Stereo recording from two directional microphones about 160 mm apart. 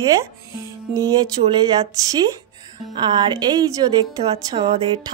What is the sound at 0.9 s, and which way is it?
A woman's voice, 25° right (ahead or behind).